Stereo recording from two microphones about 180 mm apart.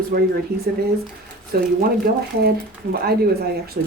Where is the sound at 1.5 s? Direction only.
55° right (ahead or behind).